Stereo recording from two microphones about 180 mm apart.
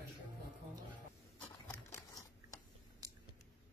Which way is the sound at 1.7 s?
20° left (ahead or behind).